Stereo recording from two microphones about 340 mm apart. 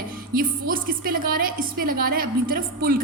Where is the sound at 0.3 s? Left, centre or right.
Right.